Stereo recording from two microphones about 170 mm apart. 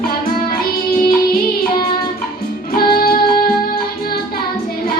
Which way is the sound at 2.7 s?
65° left (ahead or behind).